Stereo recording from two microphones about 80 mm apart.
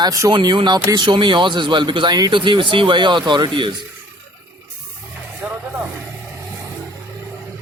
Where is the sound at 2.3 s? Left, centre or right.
Right.